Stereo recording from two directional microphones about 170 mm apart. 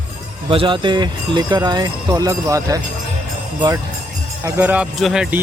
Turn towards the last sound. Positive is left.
turn(degrees=0)  # may be behind; listen again after turning